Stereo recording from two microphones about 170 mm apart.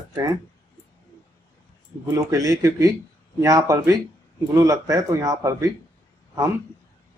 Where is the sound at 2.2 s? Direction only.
20° right (ahead or behind).